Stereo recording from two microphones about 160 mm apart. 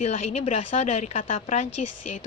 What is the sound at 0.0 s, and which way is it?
A woman's voice, 45° left (ahead or behind).